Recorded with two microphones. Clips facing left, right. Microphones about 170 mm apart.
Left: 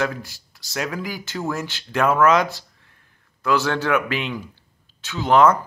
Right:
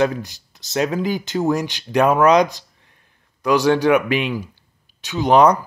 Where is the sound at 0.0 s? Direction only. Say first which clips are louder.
Right 6 dB; 20° right (ahead or behind).